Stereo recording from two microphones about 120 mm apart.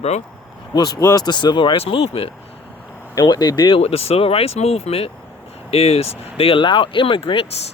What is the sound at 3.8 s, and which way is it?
Speech, 60° left (ahead or behind).